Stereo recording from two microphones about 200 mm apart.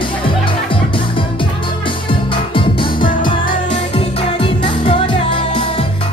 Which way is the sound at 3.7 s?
25° left (ahead or behind).